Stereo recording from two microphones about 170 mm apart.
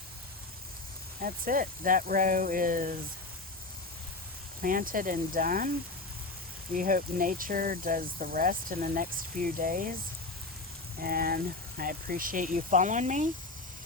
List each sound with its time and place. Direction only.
1.2 s speech: 55° right (ahead or behind)
4.6 s speech: 55° right (ahead or behind)
6.7 s speech: 55° right (ahead or behind)
11.0 s speech: 60° right (ahead or behind); by 13.3 s 45° right (ahead or behind)